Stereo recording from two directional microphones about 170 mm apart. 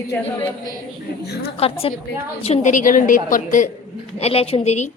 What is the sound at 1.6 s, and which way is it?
A woman's voice, 35° left (ahead or behind).